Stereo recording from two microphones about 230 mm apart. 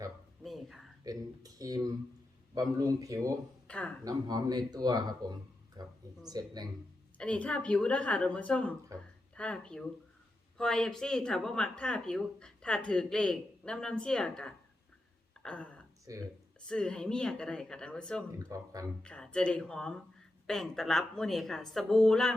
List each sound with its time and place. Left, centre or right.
0.4 s a sound: centre
1.0 s a sound: centre
2.6 s speech: centre
3.7 s speech: centre
4.0 s speech: centre
5.8 s a sound: centre
6.2 s speech: centre
7.2 s speech: centre
8.9 s speech: centre
9.3 s speech: centre
18.4 s speech: centre
19.0 s speech: centre